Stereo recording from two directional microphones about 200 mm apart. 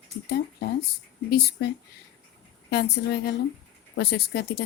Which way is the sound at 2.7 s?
55° left (ahead or behind).